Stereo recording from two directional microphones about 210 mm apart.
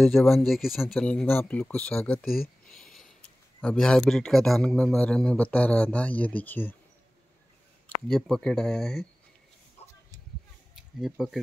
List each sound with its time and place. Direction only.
0.0 s a man's voice: centre (ahead or behind)
2.6 s a sound: 5° left (ahead or behind)
3.6 s a man's voice: 5° left (ahead or behind)
8.1 s a man's voice: 5° left (ahead or behind)
9.8 s a sound: 30° left (ahead or behind)
10.8 s speech: 5° right (ahead or behind)